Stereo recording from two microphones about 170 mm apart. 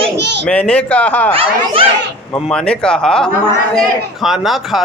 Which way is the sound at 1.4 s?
35° right (ahead or behind).